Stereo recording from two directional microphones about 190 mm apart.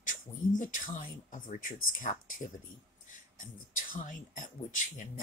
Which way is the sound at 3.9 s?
45° left (ahead or behind).